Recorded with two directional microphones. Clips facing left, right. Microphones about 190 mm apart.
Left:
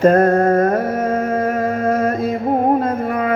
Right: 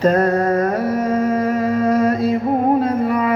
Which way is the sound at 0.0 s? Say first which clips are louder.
Left 3 dB; 50° left (ahead or behind).